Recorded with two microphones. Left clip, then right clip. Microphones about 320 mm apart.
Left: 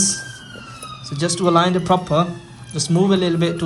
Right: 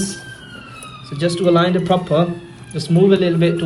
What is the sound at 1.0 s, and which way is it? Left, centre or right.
Speech, centre.